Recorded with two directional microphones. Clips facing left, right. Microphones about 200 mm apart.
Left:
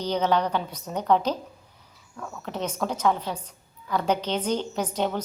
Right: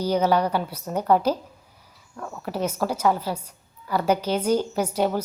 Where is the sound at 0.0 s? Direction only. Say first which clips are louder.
Right 3 dB; 10° right (ahead or behind).